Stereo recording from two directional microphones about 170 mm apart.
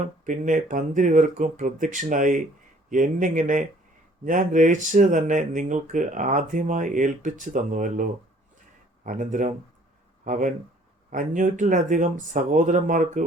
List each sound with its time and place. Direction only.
0.3 s speech: 50° right (ahead or behind)